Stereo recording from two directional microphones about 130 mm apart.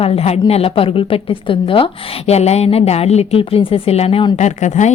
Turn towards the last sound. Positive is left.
turn(degrees=65)  # may be behind; listen again after turning